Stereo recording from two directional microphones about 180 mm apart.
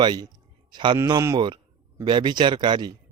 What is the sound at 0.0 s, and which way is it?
A man's voice, 25° right (ahead or behind).